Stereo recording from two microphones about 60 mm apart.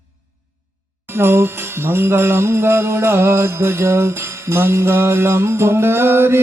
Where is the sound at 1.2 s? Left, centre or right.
Right.